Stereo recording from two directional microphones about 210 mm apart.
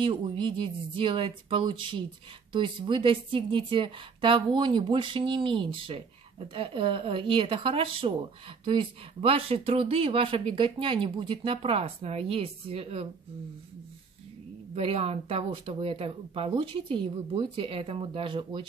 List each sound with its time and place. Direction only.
0.0 s speech: 25° right (ahead or behind)
14.8 s speech: 30° right (ahead or behind)